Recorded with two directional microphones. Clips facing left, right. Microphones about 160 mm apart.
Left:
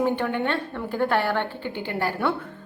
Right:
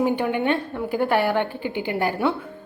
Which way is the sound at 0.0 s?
15° right (ahead or behind).